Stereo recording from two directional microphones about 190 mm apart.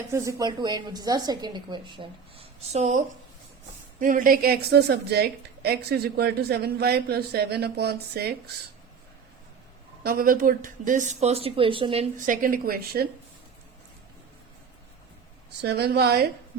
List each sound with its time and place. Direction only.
0.1 s a woman's voice: 15° right (ahead or behind); by 3.0 s 35° right (ahead or behind)
4.0 s a woman's voice: 45° right (ahead or behind)
10.0 s a woman's voice: 50° right (ahead or behind); by 12.0 s 30° right (ahead or behind)
12.1 s a woman's voice: 45° right (ahead or behind)
15.6 s a woman's voice: 60° right (ahead or behind)